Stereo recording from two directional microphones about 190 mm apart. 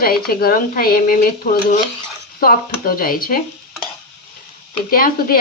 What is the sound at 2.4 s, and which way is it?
A woman's voice, 50° left (ahead or behind).